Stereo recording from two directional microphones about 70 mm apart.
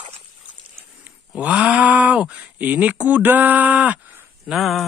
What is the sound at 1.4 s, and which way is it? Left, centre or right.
Speech, centre.